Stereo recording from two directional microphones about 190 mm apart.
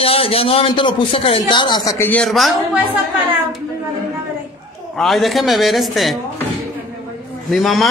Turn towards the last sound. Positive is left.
turn(degrees=0)  # may be behind; listen again after turning